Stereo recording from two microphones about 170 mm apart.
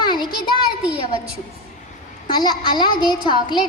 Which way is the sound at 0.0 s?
25° left (ahead or behind).